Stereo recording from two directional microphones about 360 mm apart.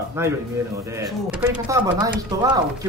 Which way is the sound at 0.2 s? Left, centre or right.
Centre.